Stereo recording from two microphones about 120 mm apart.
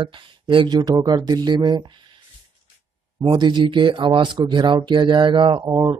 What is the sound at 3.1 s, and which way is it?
Speech, 40° right (ahead or behind).